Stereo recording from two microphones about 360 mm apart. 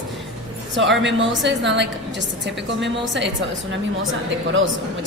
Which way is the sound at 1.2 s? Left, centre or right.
Right.